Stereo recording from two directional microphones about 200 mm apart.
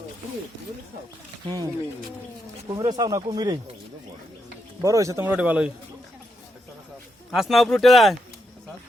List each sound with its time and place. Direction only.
1.5 s speech: 20° right (ahead or behind)
4.8 s speech: 15° right (ahead or behind)
7.3 s speech: centre (ahead or behind)